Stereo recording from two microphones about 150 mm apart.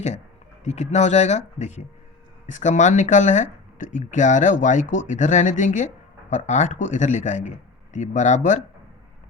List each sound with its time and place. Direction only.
0.6 s speech: 50° left (ahead or behind)